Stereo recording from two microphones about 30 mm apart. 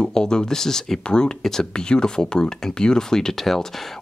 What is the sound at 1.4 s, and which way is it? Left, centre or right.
Speech, centre.